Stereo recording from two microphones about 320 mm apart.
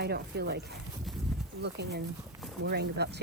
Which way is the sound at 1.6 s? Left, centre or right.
Right.